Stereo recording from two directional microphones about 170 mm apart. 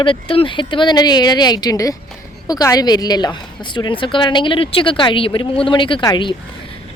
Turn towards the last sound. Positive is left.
turn(degrees=25)  # may be behind; listen again after turning